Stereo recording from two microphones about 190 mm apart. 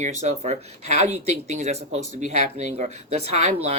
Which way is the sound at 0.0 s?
35° right (ahead or behind).